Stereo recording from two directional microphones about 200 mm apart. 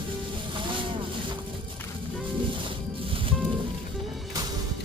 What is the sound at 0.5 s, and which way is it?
Vehicle, 25° right (ahead or behind).